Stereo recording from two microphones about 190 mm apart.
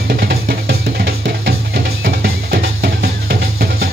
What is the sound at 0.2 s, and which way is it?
Music, 55° right (ahead or behind).